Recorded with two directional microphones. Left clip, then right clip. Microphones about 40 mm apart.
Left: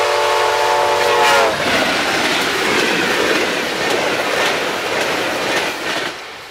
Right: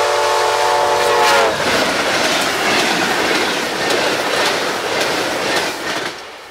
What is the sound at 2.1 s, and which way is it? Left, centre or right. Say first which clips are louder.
Train: even; right.